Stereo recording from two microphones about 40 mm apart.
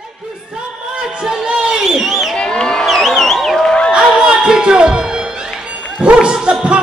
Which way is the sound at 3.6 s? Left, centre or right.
Left.